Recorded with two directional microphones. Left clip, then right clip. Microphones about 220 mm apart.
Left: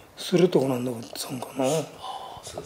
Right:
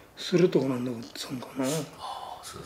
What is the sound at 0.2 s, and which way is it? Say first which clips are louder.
Speech: left 3 dB; 15° left (ahead or behind).